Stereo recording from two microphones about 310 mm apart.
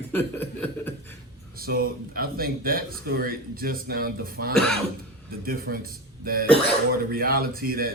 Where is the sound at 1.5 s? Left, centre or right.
Right.